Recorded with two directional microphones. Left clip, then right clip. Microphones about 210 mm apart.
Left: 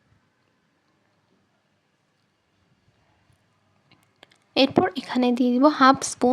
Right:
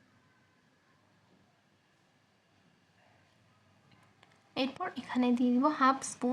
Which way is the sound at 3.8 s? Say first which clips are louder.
Left 10 dB; 40° left (ahead or behind).